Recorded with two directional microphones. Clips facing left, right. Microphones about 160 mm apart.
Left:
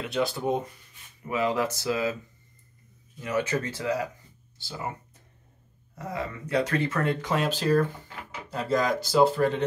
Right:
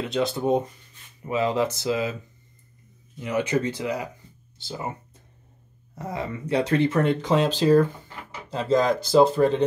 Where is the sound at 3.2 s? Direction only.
20° right (ahead or behind).